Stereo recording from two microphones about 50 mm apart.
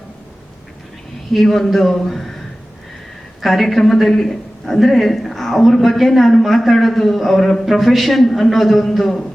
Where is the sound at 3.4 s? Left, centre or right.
Centre.